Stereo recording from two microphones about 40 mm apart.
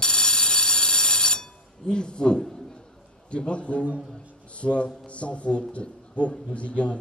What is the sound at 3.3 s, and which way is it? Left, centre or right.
A man's voice, left.